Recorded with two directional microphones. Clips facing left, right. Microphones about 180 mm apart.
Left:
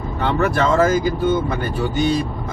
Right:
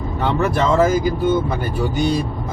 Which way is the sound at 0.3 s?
15° right (ahead or behind).